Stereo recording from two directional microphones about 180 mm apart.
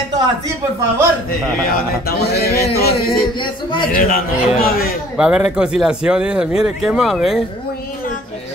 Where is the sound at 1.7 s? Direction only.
60° left (ahead or behind).